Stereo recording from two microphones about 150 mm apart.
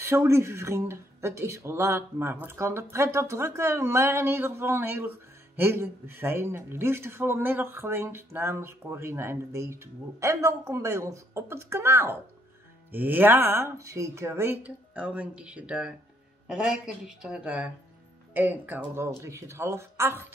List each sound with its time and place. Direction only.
0.0 s speech: 15° right (ahead or behind)